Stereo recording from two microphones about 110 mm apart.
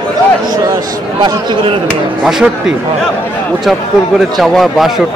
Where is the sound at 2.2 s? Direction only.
5° right (ahead or behind).